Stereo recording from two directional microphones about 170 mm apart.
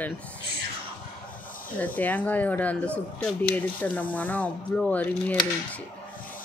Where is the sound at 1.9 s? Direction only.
10° left (ahead or behind).